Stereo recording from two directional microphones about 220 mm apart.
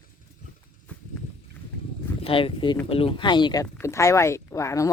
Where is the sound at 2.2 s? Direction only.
25° left (ahead or behind).